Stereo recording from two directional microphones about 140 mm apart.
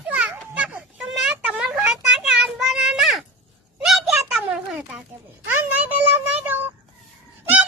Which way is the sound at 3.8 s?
5° right (ahead or behind).